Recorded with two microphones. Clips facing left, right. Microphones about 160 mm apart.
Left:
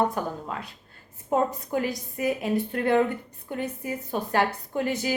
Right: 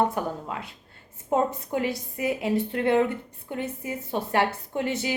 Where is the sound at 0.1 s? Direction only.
20° right (ahead or behind).